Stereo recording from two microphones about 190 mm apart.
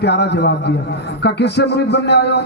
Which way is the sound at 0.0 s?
60° left (ahead or behind).